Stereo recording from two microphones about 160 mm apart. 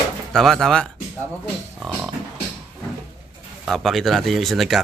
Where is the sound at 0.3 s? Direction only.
Centre (ahead or behind).